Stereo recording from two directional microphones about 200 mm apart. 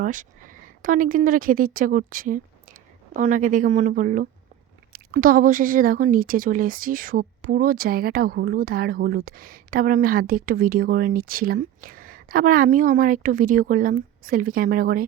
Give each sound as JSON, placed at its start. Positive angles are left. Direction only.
{"t": 0.0, "sound": "speech", "side_deg": -40}